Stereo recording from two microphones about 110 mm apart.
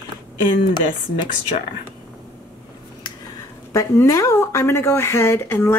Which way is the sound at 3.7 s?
30° left (ahead or behind).